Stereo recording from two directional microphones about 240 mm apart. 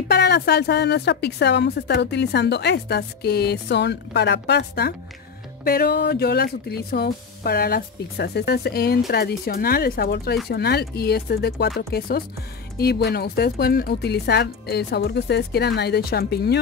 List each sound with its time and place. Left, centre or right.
0.1 s a woman's voice: left